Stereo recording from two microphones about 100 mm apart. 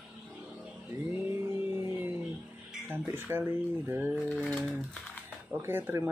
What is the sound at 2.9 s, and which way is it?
Speech, 20° right (ahead or behind).